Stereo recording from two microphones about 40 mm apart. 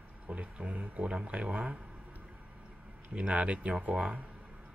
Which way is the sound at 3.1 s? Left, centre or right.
Right.